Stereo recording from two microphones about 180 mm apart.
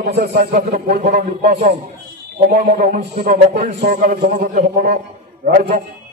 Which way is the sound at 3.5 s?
55° right (ahead or behind).